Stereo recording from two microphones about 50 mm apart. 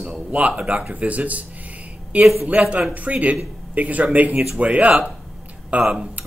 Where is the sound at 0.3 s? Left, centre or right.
Right.